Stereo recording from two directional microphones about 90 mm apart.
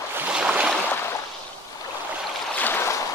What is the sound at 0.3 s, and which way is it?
Boat, 10° right (ahead or behind).